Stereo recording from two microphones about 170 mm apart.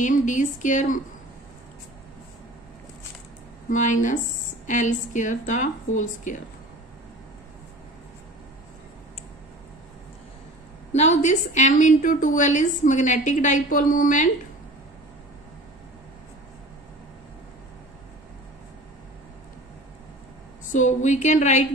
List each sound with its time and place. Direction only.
0.0 s a woman's voice: 50° left (ahead or behind)
3.6 s a woman's voice: 50° left (ahead or behind)
10.9 s a woman's voice: 45° left (ahead or behind)
20.7 s a woman's voice: 45° left (ahead or behind)